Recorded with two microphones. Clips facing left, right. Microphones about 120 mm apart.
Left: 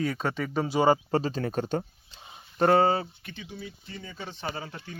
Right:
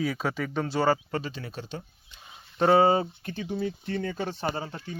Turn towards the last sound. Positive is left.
turn(degrees=-25)  # may be behind; listen again after turning